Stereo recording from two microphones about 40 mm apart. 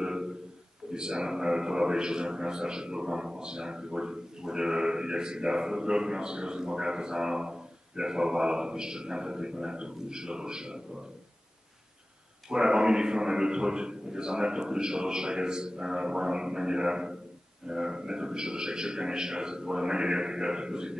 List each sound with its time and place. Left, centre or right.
0.0 s a sound: centre
0.9 s a man's voice: right
12.4 s a man's voice: centre